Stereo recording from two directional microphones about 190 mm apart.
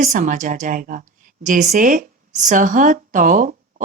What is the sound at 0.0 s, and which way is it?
Speech, 45° right (ahead or behind).